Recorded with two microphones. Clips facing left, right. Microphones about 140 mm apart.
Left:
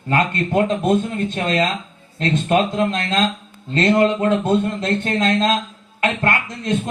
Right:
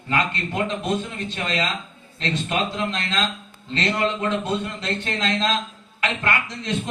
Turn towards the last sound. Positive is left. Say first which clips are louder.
# left 4 dB
turn(degrees=50)  # may be behind; listen again after turning